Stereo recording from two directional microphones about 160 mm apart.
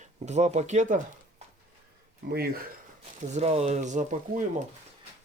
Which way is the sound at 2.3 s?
70° right (ahead or behind).